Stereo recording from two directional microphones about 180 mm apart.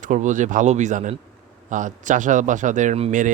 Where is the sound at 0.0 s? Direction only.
45° right (ahead or behind).